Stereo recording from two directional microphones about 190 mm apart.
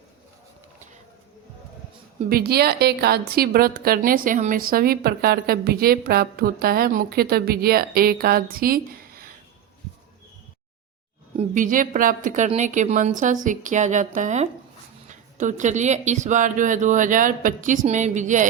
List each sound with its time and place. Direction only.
2.3 s a woman's voice: 55° right (ahead or behind)
11.3 s speech: 45° right (ahead or behind)